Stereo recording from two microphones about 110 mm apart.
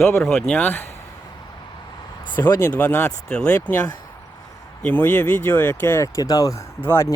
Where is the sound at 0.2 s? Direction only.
5° left (ahead or behind).